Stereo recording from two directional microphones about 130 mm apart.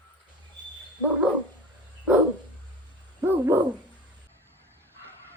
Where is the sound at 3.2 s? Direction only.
15° right (ahead or behind).